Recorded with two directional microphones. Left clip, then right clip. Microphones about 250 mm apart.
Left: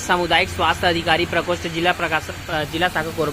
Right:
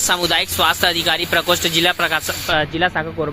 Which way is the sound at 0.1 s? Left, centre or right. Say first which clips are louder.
Left 2 dB; centre.